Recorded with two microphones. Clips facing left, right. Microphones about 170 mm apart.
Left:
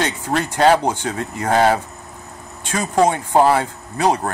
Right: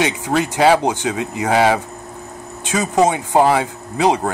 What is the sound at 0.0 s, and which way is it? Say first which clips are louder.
Speech: right 3 dB; 10° right (ahead or behind).